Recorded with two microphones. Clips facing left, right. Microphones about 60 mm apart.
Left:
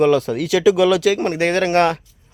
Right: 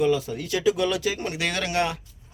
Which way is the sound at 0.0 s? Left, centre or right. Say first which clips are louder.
Left 8 dB; left.